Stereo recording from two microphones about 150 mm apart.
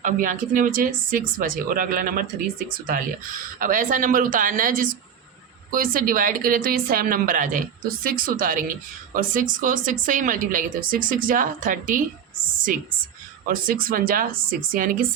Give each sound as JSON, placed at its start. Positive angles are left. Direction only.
{"t": 0.0, "sound": "a woman's voice", "side_deg": -65}
{"t": 13.5, "sound": "a woman's voice", "side_deg": -70}